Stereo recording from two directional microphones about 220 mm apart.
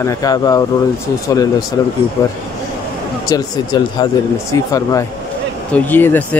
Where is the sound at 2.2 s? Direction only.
15° left (ahead or behind).